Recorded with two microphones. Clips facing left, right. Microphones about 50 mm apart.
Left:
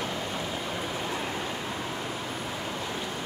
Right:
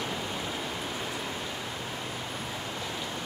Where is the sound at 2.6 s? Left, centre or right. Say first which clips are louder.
Left 2 dB; left.